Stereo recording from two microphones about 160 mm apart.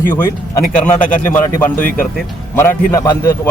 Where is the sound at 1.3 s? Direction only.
20° left (ahead or behind).